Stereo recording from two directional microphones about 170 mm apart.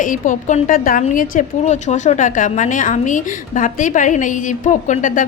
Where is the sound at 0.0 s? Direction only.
50° left (ahead or behind).